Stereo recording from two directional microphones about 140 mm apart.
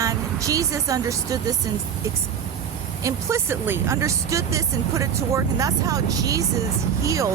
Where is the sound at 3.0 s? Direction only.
20° right (ahead or behind).